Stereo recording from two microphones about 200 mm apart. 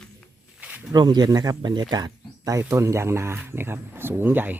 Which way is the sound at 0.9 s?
20° right (ahead or behind).